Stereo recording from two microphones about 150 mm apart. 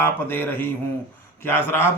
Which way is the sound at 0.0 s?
15° left (ahead or behind).